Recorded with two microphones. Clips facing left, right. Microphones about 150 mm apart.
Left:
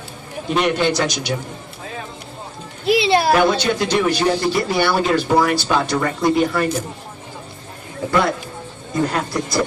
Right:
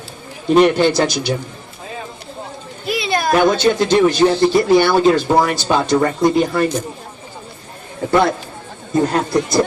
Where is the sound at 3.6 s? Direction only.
25° right (ahead or behind).